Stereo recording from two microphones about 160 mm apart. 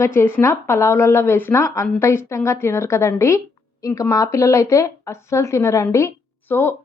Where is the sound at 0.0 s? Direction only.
15° left (ahead or behind).